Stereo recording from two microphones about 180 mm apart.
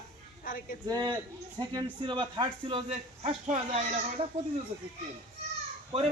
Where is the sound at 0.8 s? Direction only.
20° right (ahead or behind).